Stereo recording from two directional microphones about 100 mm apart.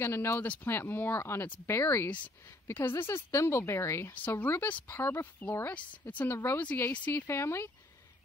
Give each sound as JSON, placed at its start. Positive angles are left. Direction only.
{"t": 0.0, "sound": "speech", "side_deg": 25}
{"t": 2.0, "sound": "speech", "side_deg": 15}
{"t": 4.1, "sound": "speech", "side_deg": 15}